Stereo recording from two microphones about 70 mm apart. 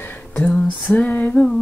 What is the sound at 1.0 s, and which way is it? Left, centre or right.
Female singing, left.